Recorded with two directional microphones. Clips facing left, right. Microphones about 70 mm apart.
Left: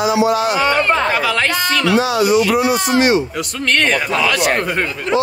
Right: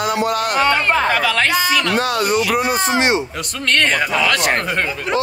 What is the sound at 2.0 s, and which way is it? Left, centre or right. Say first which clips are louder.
Speech: left 3 dB; right.